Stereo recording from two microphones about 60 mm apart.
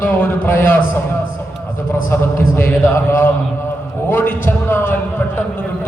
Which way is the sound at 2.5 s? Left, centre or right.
Left.